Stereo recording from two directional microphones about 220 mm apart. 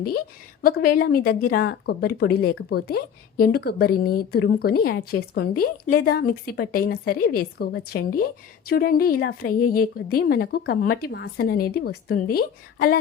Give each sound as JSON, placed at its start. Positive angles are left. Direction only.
{"t": 0.6, "sound": "speech", "side_deg": 40}